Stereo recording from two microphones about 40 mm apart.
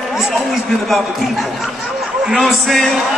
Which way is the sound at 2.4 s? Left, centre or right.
Centre.